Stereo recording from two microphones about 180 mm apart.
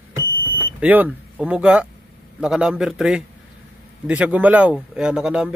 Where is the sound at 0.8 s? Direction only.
10° right (ahead or behind).